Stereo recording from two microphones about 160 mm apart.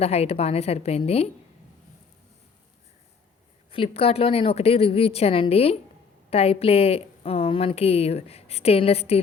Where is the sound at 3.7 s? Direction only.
35° left (ahead or behind).